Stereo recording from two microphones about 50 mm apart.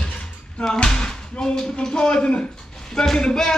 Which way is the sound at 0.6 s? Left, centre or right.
Centre.